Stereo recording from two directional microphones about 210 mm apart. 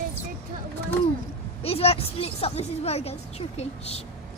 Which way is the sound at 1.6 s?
30° left (ahead or behind).